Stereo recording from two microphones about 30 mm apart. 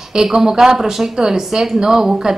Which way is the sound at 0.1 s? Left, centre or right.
Right.